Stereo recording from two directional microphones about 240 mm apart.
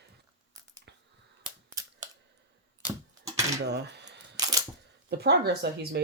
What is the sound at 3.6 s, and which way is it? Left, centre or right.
Camera, right.